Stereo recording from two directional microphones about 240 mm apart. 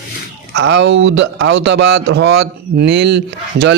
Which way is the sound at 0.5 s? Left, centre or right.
Right.